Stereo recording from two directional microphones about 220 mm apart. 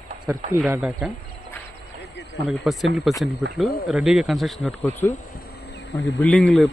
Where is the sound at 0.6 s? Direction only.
5° right (ahead or behind).